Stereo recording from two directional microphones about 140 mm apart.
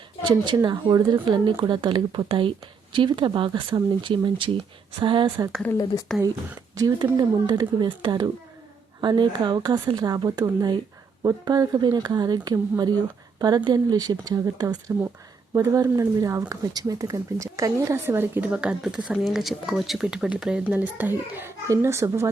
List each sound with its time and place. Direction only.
0.3 s speech: 35° right (ahead or behind)
6.1 s speech: 5° left (ahead or behind)
6.7 s speech: 30° right (ahead or behind)